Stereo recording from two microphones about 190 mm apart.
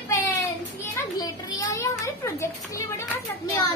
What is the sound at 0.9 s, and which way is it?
Children playing, 20° left (ahead or behind).